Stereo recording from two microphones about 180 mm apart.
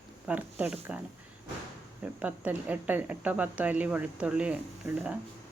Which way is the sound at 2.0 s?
10° right (ahead or behind).